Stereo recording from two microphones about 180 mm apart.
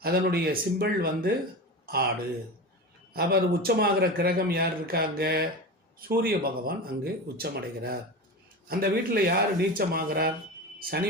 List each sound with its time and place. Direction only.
0.0 s a man's voice: 60° right (ahead or behind)
3.1 s a man's voice: 60° right (ahead or behind)